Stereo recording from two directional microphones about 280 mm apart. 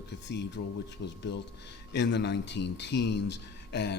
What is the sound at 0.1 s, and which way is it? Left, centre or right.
Speech, left.